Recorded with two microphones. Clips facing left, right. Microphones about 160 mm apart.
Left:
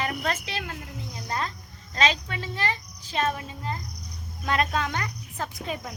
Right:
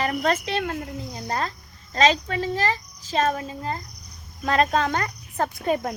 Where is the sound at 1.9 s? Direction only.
35° right (ahead or behind).